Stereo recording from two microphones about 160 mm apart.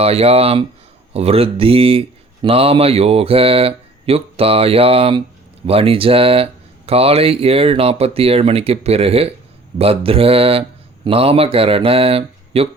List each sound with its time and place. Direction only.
0.0 s speech: 40° right (ahead or behind)